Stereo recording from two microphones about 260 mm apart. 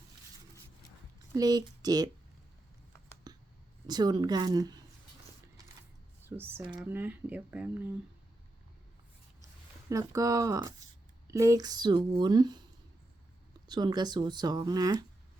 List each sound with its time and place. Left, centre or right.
1.4 s speech: centre
3.3 s a sound: centre
3.8 s speech: centre
6.2 s speech: centre
9.9 s speech: centre
13.7 s speech: centre